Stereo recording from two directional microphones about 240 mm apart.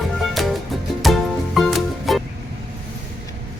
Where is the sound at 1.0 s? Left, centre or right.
Centre.